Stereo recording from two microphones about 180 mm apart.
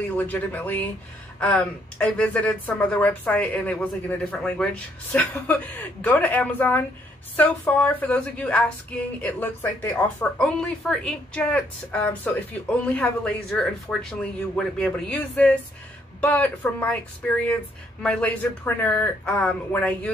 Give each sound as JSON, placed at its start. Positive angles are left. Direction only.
{"t": 0.2, "sound": "a woman's voice", "side_deg": 10}